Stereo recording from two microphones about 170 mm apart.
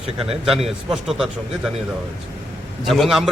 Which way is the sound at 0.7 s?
Centre (ahead or behind).